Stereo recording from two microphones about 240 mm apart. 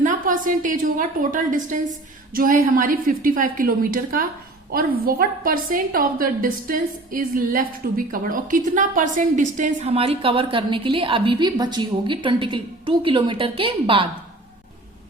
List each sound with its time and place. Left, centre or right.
0.0 s a woman's voice: right